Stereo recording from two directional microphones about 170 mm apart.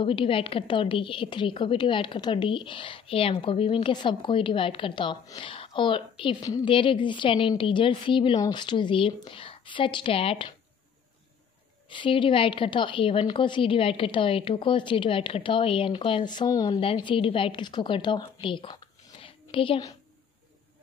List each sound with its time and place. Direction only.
0.0 s a woman's voice: 30° left (ahead or behind)
11.9 s a woman's voice: 30° left (ahead or behind)